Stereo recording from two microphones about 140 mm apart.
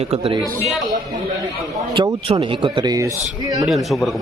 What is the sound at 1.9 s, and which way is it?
Speech, 35° right (ahead or behind).